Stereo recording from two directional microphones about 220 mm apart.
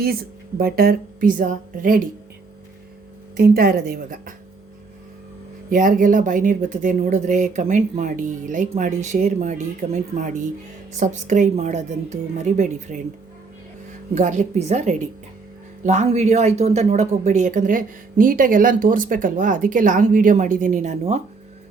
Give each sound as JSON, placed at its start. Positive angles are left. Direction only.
{"t": 0.0, "sound": "speech", "side_deg": -45}
{"t": 3.3, "sound": "a woman's voice", "side_deg": -45}
{"t": 5.7, "sound": "speech", "side_deg": -40}
{"t": 14.2, "sound": "speech", "side_deg": -35}